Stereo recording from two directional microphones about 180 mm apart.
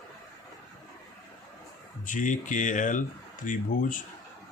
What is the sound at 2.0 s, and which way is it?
Speech, 45° left (ahead or behind).